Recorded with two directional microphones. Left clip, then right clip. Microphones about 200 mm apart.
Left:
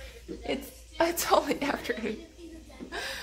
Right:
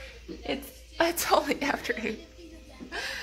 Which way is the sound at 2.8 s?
5° right (ahead or behind).